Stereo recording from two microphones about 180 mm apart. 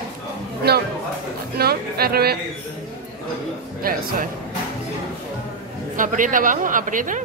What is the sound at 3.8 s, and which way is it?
Speech, 55° right (ahead or behind).